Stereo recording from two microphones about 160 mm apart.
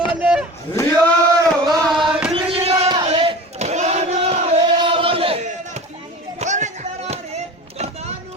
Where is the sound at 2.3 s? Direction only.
35° right (ahead or behind).